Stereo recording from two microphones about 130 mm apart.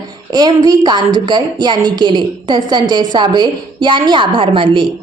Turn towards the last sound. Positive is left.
turn(degrees=-40)  # may be behind; listen again after turning